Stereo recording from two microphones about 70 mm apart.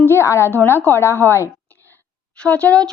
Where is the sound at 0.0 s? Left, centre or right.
Left.